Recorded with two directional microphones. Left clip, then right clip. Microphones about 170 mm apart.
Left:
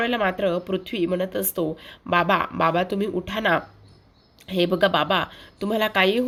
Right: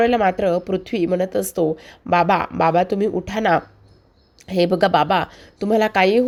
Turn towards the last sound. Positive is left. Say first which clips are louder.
# right 5 dB
turn(degrees=-30)  # may be behind; listen again after turning